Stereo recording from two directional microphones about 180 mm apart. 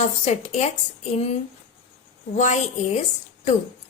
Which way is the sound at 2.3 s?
40° left (ahead or behind).